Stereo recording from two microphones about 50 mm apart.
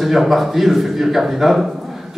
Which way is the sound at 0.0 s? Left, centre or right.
Centre.